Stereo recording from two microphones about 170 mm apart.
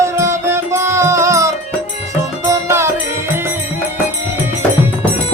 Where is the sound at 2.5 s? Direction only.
15° right (ahead or behind).